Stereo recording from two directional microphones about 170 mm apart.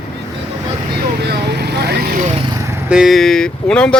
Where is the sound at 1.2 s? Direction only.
75° right (ahead or behind).